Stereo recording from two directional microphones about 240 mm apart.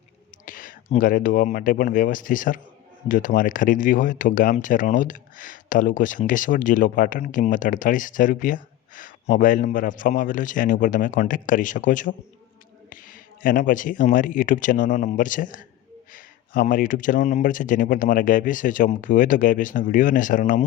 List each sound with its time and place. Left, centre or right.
0.4 s speech: left
13.4 s speech: left